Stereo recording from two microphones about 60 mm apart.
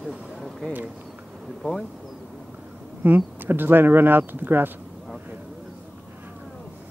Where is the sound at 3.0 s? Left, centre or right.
Right.